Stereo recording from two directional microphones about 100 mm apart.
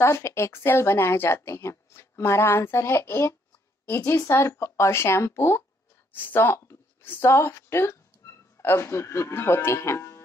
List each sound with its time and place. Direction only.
0.0 s a woman's voice: 25° left (ahead or behind)